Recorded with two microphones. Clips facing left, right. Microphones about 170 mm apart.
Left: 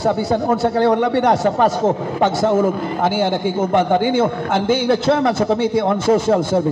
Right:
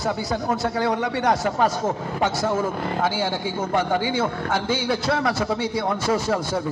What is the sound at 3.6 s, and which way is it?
Speech, 25° left (ahead or behind).